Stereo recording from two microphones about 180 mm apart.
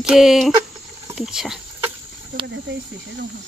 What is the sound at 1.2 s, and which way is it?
Speech, centre (ahead or behind).